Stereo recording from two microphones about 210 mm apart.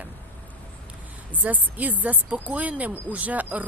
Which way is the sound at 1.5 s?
5° right (ahead or behind).